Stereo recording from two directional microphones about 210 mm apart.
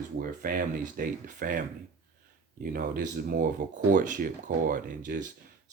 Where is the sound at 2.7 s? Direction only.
40° right (ahead or behind).